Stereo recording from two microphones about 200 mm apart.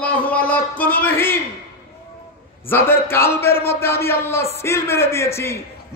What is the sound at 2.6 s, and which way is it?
A man's voice, 10° left (ahead or behind).